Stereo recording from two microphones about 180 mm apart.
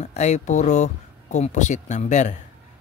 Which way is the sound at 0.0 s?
40° left (ahead or behind).